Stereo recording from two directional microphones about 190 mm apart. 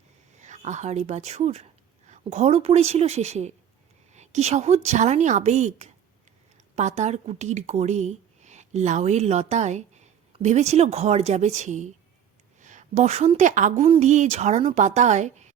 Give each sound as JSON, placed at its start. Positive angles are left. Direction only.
{"t": 0.3, "sound": "a woman's voice", "side_deg": -40}